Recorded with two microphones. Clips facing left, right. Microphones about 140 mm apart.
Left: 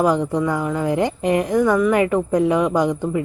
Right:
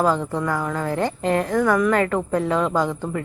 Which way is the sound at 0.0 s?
15° left (ahead or behind).